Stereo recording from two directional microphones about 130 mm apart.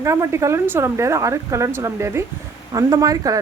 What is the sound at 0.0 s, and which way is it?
Speech, 20° right (ahead or behind).